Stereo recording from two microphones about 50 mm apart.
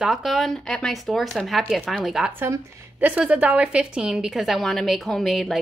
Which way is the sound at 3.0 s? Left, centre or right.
Right.